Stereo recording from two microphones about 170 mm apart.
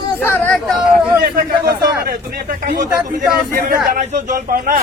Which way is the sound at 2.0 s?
55° right (ahead or behind).